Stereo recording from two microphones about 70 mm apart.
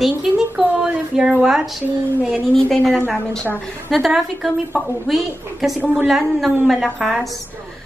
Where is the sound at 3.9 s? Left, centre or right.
Centre.